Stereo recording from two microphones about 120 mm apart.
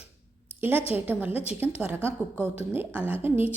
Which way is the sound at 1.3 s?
55° left (ahead or behind).